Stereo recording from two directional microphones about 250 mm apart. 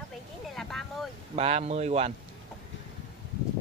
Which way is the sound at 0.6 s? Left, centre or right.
Centre.